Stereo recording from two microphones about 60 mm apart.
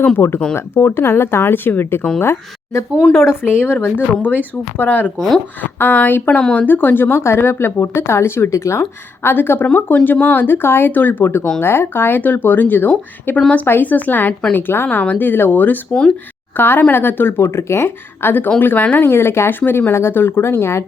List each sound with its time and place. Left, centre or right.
0.2 s speech: left
3.1 s speech: centre
3.4 s speech: left
6.4 s speech: centre
6.7 s speech: left
14.8 s speech: left
15.9 s speech: centre
16.6 s speech: left
19.0 s speech: left